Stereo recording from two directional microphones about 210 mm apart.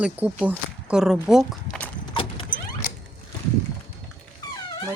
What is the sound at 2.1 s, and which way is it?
Vehicle, 25° left (ahead or behind).